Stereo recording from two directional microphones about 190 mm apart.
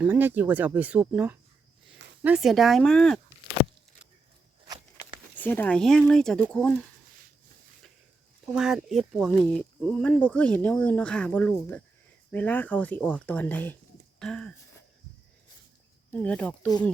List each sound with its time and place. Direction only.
0.0 s speech: 10° right (ahead or behind)
5.4 s speech: 10° left (ahead or behind)
8.4 s speech: centre (ahead or behind)
16.1 s speech: 5° left (ahead or behind)